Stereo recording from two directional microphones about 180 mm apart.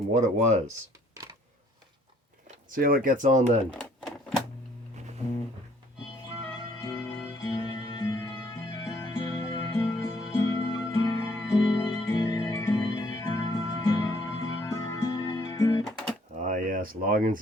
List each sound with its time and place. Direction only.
0.1 s speech: 40° right (ahead or behind)
2.6 s speech: 50° right (ahead or behind)
3.7 s typewriter: 5° left (ahead or behind)
6.8 s music: 20° left (ahead or behind)
16.3 s a sound: 45° right (ahead or behind)